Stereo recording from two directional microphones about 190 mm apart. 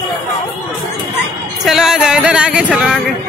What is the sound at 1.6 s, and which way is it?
Music, centre (ahead or behind).